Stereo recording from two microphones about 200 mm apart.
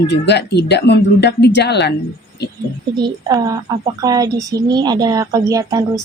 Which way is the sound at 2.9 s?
20° right (ahead or behind).